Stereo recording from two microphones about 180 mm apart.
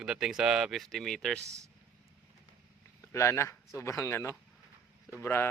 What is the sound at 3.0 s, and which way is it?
Speech, 15° left (ahead or behind).